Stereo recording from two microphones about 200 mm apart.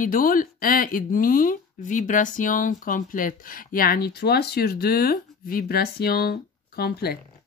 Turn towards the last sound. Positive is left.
turn(degrees=50)  # may be behind; listen again after turning